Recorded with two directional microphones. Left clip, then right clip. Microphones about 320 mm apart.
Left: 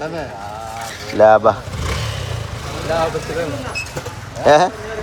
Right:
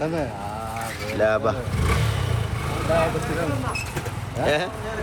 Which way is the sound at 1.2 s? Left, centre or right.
Centre.